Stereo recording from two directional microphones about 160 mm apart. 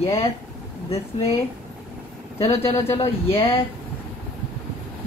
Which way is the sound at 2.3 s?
40° left (ahead or behind).